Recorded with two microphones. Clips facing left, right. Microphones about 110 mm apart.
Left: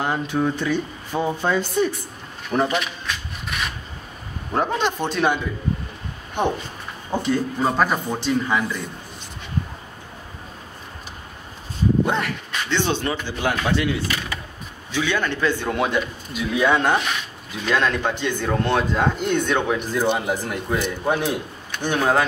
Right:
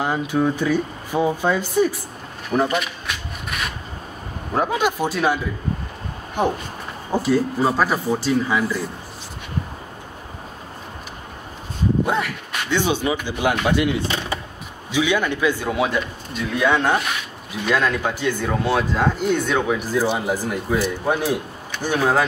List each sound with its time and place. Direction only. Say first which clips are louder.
0.0 s speech: right 2 dB; 5° right (ahead or behind)
4.6 s speech: right 2 dB; 5° right (ahead or behind)
12.1 s speech: right 1 dB; 10° right (ahead or behind)
14.0 s skateboard: right 3 dB; 25° right (ahead or behind)
14.9 s speech: right 3 dB; 10° right (ahead or behind)